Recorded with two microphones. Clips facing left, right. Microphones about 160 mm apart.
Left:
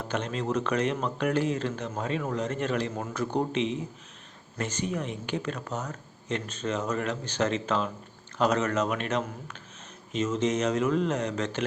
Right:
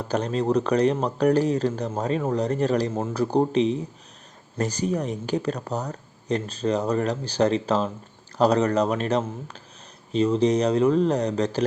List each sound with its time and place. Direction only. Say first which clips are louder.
0.0 s speech: right 6 dB; 35° right (ahead or behind)